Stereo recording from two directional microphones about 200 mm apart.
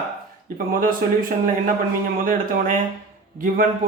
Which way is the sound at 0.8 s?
45° right (ahead or behind).